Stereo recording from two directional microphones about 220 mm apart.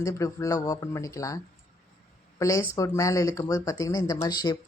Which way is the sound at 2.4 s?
15° left (ahead or behind).